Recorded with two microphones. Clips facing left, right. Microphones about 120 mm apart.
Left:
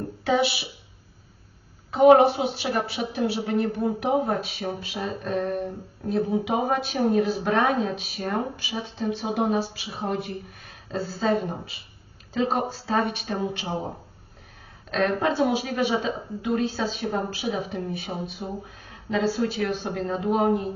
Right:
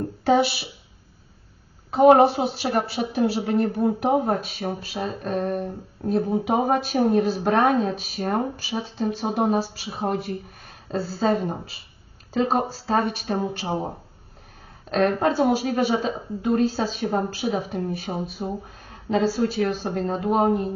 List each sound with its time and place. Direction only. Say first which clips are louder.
0.3 s speech: right 3 dB; 40° right (ahead or behind)
1.9 s speech: right 1 dB; 40° right (ahead or behind)
14.8 s speech: right 3 dB; 40° right (ahead or behind)